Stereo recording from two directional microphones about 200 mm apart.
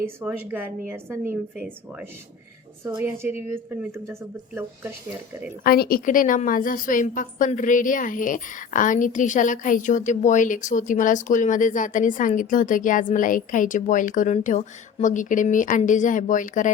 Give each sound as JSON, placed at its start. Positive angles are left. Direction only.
{"t": 0.2, "sound": "a woman's voice", "side_deg": -10}
{"t": 5.6, "sound": "a woman's voice", "side_deg": 50}